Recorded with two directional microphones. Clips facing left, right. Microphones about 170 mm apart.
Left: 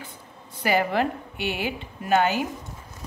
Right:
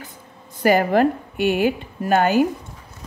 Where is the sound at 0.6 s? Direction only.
45° right (ahead or behind).